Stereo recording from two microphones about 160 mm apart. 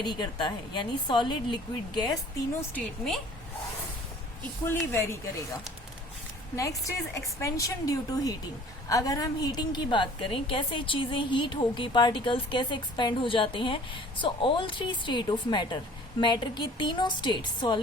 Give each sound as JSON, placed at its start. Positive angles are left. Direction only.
{"t": 0.0, "sound": "a woman's voice", "side_deg": 30}
{"t": 4.6, "sound": "speech", "side_deg": 15}
{"t": 6.6, "sound": "a woman's voice", "side_deg": 20}